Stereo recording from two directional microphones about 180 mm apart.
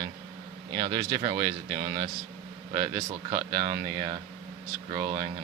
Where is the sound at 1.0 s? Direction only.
20° right (ahead or behind).